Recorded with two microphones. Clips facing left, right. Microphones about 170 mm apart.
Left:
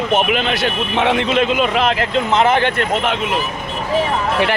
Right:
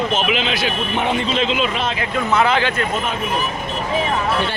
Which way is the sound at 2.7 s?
80° left.